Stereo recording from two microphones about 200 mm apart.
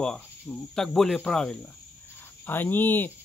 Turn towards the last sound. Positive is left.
turn(degrees=10)  # may be behind; listen again after turning